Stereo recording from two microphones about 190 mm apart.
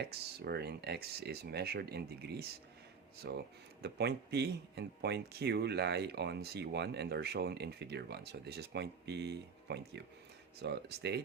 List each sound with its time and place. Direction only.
0.0 s speech: 60° right (ahead or behind)